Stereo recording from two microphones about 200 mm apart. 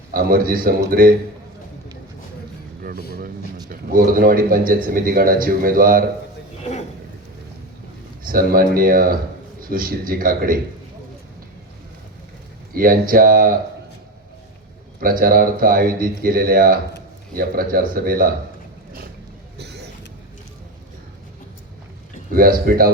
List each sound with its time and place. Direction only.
0.1 s a man's voice: 45° right (ahead or behind)
3.7 s a man's voice: 45° right (ahead or behind)
8.2 s a man's voice: 45° right (ahead or behind)
12.7 s a man's voice: 45° right (ahead or behind)
15.0 s a man's voice: 45° right (ahead or behind)
19.5 s a sound: 55° right (ahead or behind)
22.3 s a man's voice: 45° right (ahead or behind)